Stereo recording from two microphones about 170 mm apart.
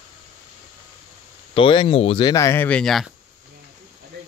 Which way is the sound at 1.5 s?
30° left (ahead or behind).